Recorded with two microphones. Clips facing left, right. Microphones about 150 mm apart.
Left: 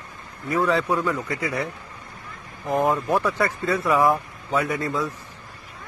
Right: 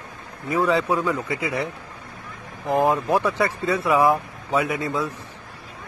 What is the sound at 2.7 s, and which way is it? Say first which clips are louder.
Speech: right 2 dB; 20° right (ahead or behind).